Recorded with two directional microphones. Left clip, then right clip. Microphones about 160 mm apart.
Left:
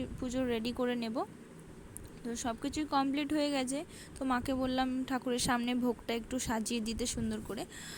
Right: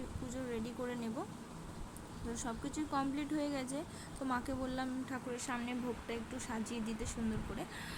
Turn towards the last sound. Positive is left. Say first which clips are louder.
# left 3 dB
turn(degrees=50)  # may be behind; listen again after turning